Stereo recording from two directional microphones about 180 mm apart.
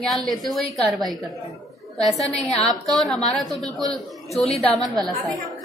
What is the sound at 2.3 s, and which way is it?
A woman's voice, 5° left (ahead or behind).